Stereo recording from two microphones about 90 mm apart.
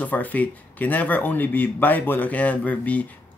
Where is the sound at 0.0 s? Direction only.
20° left (ahead or behind).